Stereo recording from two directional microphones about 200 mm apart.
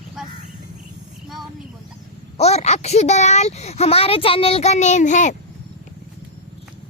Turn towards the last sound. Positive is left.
turn(degrees=40)  # may be behind; listen again after turning